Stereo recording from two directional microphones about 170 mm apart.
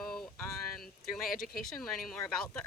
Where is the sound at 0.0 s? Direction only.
5° left (ahead or behind).